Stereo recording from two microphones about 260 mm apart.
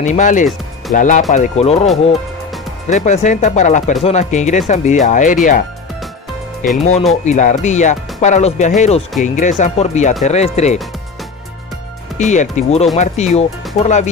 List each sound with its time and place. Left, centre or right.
0.0 s speech: left
2.9 s speech: left
6.8 s speech: left
12.2 s speech: left